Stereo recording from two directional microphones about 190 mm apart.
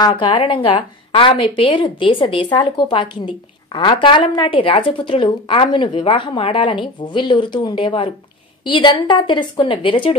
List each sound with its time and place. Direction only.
0.0 s a woman's voice: 25° left (ahead or behind)